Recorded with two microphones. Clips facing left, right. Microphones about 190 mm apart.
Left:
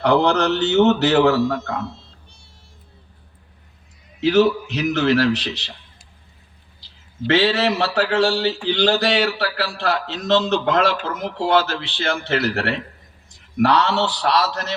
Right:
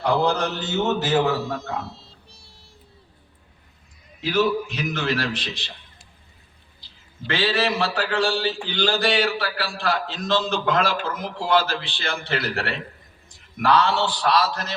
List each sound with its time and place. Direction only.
0.0 s a man's voice: 70° left (ahead or behind)
2.0 s music: 35° right (ahead or behind)
4.2 s a man's voice: 80° left
7.3 s a man's voice: 65° left (ahead or behind)
10.2 s a man's voice: 25° left (ahead or behind)
10.5 s a man's voice: 70° left (ahead or behind)